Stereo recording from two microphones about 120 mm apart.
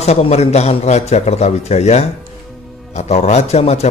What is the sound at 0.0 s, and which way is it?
Speech, 60° left (ahead or behind).